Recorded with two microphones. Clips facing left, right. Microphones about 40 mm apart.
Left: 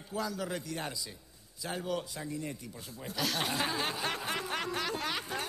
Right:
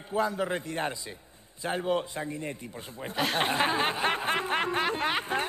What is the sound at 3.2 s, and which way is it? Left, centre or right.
Snicker, right.